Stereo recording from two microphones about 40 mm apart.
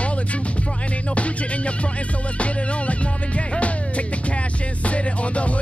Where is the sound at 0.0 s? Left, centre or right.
Left.